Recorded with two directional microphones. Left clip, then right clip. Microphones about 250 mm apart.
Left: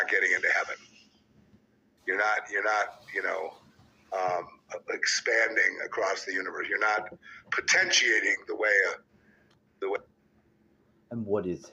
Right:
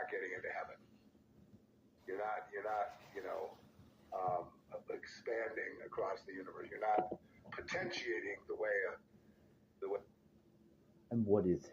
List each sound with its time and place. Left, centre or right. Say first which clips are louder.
0.0 s speech: left 18 dB; left
2.0 s speech: left 15 dB; left
11.1 s a man's voice: left 4 dB; centre